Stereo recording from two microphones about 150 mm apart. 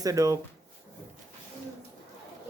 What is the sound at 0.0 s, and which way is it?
Speech, 20° right (ahead or behind).